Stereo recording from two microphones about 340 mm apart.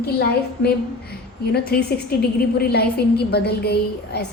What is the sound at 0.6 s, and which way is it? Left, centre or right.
A woman's voice, left.